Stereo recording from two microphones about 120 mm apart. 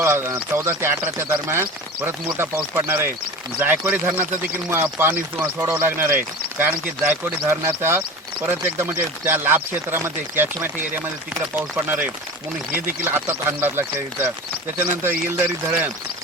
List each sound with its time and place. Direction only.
0.0 s speech: 20° right (ahead or behind)